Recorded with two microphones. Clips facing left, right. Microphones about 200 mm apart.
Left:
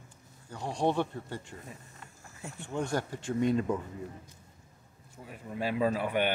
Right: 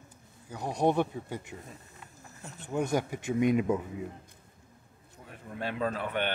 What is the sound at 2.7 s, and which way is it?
Speech, 10° right (ahead or behind).